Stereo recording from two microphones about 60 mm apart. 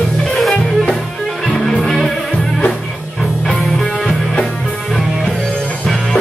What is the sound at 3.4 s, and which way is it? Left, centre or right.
Music, centre.